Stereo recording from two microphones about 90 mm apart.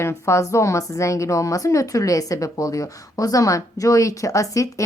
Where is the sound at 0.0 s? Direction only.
35° left (ahead or behind).